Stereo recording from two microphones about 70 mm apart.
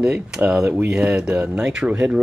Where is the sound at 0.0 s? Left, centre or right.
Centre.